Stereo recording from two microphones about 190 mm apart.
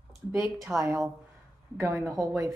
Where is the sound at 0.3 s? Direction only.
10° right (ahead or behind).